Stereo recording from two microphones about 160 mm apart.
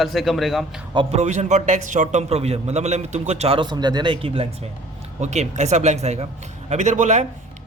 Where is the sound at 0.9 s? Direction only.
40° right (ahead or behind).